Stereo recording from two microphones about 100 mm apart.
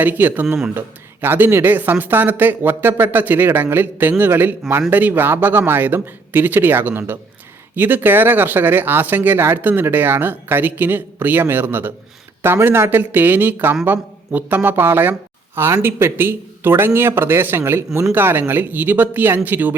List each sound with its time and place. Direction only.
0.0 s speech: 20° right (ahead or behind)